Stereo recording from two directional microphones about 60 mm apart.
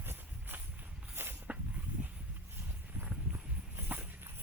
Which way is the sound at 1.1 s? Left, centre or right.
Right.